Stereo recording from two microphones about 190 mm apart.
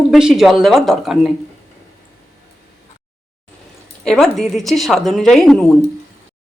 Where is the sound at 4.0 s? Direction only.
5° left (ahead or behind).